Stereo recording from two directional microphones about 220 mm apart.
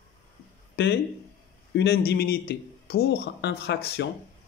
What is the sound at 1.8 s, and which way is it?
Speech, 45° left (ahead or behind).